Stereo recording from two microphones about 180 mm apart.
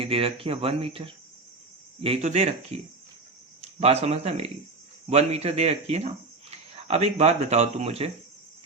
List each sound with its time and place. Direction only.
0.0 s speech: 30° right (ahead or behind)